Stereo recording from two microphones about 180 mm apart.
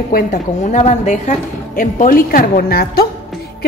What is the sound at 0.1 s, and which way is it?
A woman's voice, 45° left (ahead or behind).